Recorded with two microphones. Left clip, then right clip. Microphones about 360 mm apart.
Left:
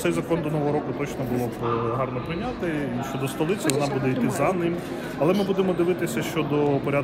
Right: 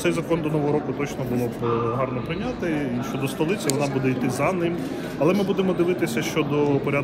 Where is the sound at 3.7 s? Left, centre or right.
Left.